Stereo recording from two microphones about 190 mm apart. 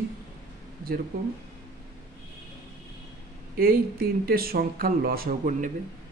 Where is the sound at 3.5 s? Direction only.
50° right (ahead or behind).